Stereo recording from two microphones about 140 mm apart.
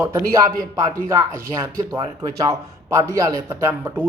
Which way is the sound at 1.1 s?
20° right (ahead or behind).